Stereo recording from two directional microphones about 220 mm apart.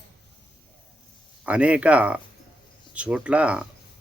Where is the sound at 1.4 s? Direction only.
5° right (ahead or behind).